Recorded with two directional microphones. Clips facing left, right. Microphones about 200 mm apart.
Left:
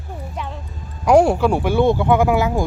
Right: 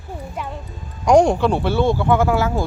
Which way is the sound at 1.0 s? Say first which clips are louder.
Even; 5° left (ahead or behind).